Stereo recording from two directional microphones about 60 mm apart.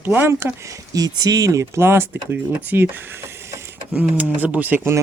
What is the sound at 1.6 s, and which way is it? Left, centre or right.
Speech, right.